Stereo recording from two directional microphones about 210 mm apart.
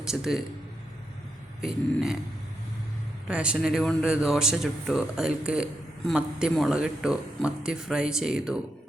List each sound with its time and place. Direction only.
0.0 s speech: centre (ahead or behind)
1.6 s speech: centre (ahead or behind)
3.2 s speech: 5° right (ahead or behind)